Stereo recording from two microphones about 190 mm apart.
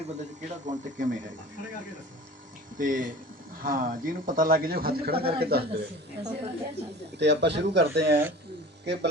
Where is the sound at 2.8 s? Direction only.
45° right (ahead or behind).